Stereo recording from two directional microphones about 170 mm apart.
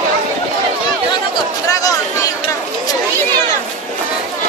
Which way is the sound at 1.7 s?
20° left (ahead or behind).